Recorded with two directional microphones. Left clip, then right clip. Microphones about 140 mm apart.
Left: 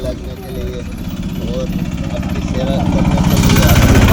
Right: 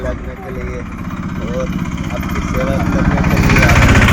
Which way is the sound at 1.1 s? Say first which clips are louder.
Even; 30° left (ahead or behind).